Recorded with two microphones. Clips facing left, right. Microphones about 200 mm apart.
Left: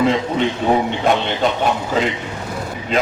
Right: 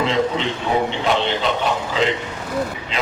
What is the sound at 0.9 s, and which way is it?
A man's voice, 50° left (ahead or behind).